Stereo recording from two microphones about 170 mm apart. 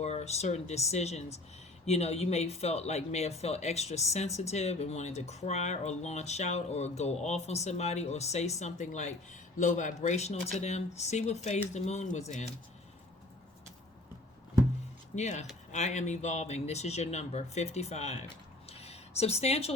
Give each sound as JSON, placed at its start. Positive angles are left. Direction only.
{"t": 0.0, "sound": "speech", "side_deg": 40}
{"t": 15.1, "sound": "speech", "side_deg": 45}
{"t": 18.7, "sound": "a sound", "side_deg": 40}